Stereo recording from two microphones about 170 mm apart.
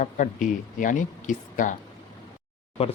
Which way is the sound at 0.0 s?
50° left (ahead or behind).